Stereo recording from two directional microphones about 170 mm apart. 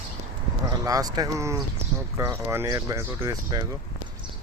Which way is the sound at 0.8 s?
20° right (ahead or behind).